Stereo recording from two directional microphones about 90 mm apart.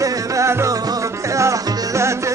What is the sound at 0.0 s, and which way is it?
Music, 40° right (ahead or behind).